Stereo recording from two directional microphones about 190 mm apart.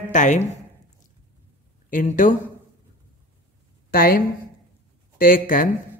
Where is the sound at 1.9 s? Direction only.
45° left (ahead or behind).